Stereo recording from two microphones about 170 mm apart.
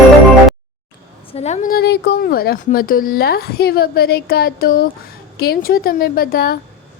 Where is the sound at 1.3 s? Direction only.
40° left (ahead or behind); by 6.6 s 60° left (ahead or behind).